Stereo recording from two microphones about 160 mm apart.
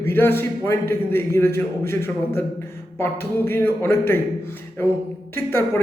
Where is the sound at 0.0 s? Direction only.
15° left (ahead or behind).